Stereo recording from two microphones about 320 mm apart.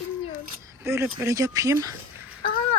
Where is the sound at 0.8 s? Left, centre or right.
Centre.